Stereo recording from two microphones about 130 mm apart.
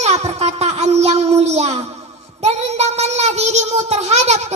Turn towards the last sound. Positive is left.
turn(degrees=-55)  # may be behind; listen again after turning